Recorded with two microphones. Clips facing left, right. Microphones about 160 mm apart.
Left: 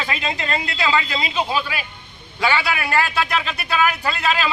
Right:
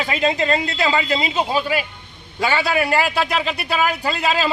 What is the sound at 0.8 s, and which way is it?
A man's voice, 45° right (ahead or behind).